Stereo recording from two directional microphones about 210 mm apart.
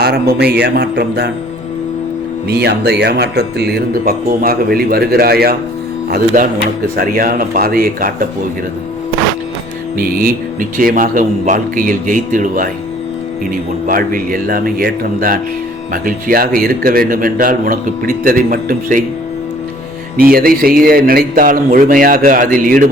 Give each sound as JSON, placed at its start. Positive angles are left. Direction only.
{"t": 0.0, "sound": "speech", "side_deg": -50}
{"t": 2.5, "sound": "speech", "side_deg": -50}
{"t": 10.0, "sound": "speech", "side_deg": -40}
{"t": 13.8, "sound": "speech", "side_deg": -40}
{"t": 20.3, "sound": "speech", "side_deg": -45}